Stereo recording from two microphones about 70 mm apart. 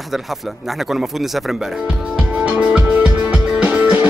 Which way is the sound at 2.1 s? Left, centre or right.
Centre.